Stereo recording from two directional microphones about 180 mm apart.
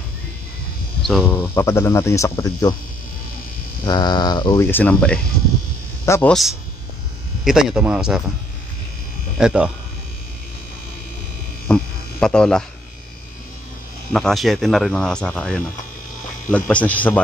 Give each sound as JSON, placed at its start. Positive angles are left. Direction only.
{"t": 1.0, "sound": "speech", "side_deg": 0}
{"t": 1.4, "sound": "speech", "side_deg": 15}
{"t": 3.8, "sound": "a man's voice", "side_deg": 25}
{"t": 7.4, "sound": "speech", "side_deg": -5}
{"t": 9.4, "sound": "speech", "side_deg": -5}
{"t": 11.6, "sound": "speech", "side_deg": 5}
{"t": 14.1, "sound": "speech", "side_deg": 0}